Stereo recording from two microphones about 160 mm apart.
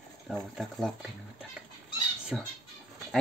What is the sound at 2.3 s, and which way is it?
Speech, 5° right (ahead or behind).